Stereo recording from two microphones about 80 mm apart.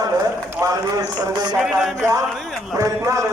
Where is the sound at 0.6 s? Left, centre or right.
Right.